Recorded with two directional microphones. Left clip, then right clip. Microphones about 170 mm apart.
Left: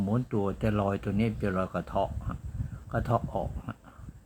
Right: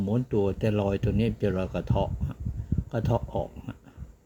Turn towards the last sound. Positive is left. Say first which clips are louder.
# right 1 dB
turn(degrees=-15)  # may be behind; listen again after turning